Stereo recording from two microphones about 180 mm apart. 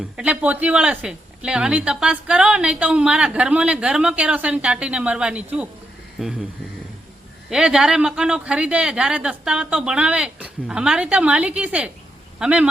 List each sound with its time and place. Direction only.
0.2 s speech: 5° right (ahead or behind)
7.5 s speech: 5° right (ahead or behind)